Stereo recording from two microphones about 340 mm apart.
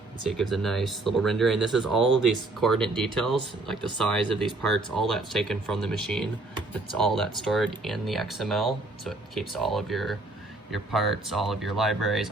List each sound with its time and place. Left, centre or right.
0.3 s speech: centre
2.1 s speech: right
2.6 s speech: centre